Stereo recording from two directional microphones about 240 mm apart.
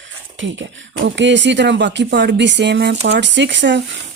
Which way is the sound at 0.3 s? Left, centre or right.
Right.